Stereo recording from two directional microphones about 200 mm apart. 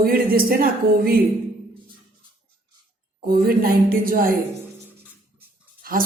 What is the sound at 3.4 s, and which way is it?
Speech, 50° right (ahead or behind).